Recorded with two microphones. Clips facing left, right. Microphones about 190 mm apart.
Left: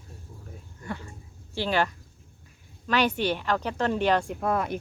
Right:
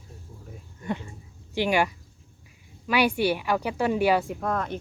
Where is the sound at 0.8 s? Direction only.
20° right (ahead or behind).